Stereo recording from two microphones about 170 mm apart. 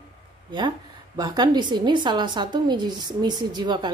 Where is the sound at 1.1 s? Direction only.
25° right (ahead or behind).